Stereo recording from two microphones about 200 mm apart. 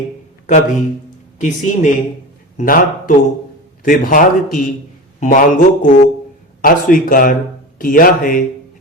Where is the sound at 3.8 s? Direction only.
45° left (ahead or behind).